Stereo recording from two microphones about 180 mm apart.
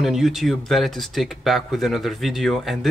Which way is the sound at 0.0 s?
Centre (ahead or behind).